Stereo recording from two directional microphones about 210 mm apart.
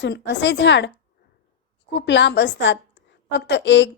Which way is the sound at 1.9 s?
55° left (ahead or behind).